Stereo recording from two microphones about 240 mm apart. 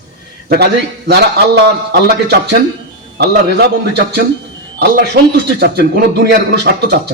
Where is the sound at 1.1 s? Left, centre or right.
Right.